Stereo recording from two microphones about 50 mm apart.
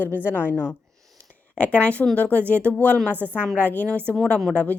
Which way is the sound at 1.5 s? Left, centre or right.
Left.